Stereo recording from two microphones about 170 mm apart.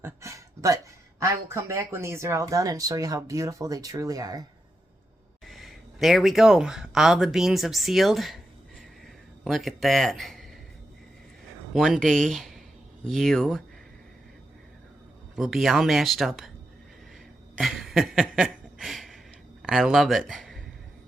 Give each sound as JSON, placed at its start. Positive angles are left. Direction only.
{"t": 0.0, "sound": "a sound", "side_deg": -15}
{"t": 1.2, "sound": "speech", "side_deg": -15}
{"t": 5.5, "sound": "speech", "side_deg": 0}
{"t": 9.4, "sound": "speech", "side_deg": 0}
{"t": 11.7, "sound": "speech", "side_deg": 0}
{"t": 15.4, "sound": "speech", "side_deg": 0}
{"t": 17.6, "sound": "a sound", "side_deg": 0}
{"t": 19.6, "sound": "speech", "side_deg": 0}